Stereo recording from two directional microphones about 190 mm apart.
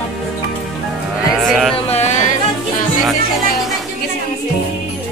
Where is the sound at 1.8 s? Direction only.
35° left (ahead or behind).